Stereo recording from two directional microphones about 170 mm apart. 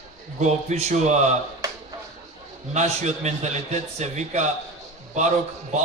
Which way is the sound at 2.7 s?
40° right (ahead or behind).